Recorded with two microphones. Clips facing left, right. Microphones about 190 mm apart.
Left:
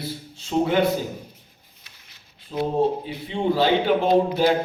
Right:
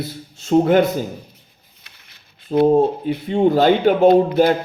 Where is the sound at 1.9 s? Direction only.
60° right (ahead or behind).